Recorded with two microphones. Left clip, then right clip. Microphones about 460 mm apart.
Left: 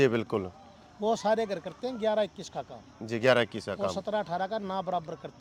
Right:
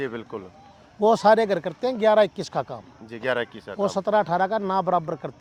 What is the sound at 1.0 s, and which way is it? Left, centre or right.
Speech, right.